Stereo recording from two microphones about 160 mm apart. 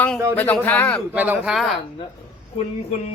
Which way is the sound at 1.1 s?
10° right (ahead or behind).